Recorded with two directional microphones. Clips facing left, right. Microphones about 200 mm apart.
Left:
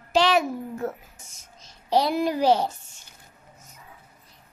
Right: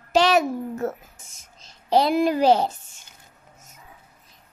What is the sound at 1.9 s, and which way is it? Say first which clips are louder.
Speech: right 3 dB; 55° right (ahead or behind).